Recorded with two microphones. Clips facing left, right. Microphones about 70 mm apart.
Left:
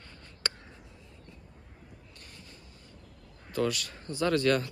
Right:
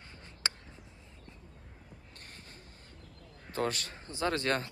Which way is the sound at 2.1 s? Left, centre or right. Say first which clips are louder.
Right 1 dB; right.